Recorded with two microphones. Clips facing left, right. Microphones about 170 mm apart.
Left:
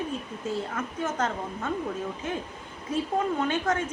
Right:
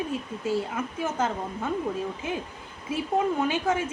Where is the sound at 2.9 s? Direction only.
10° right (ahead or behind).